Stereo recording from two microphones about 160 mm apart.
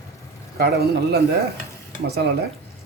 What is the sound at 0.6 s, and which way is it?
Speech, 75° right (ahead or behind).